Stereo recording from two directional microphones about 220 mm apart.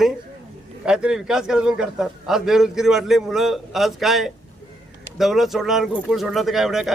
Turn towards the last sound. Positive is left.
turn(degrees=0)  # may be behind; listen again after turning